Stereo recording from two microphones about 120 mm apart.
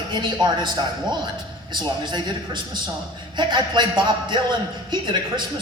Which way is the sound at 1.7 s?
40° right (ahead or behind).